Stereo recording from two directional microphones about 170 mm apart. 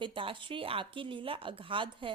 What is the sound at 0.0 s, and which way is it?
A woman's voice, 30° right (ahead or behind).